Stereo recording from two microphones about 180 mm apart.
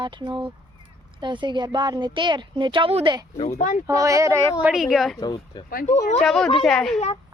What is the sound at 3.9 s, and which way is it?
Speech, 15° right (ahead or behind).